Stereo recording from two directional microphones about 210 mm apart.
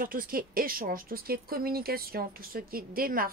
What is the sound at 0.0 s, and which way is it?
Speech, 45° right (ahead or behind).